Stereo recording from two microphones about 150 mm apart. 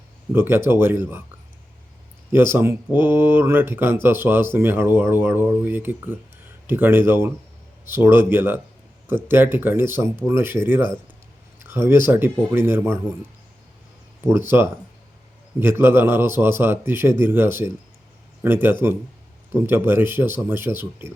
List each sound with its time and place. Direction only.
0.3 s speech: 15° right (ahead or behind)
2.3 s speech: 15° right (ahead or behind)
14.5 s speech: 15° right (ahead or behind)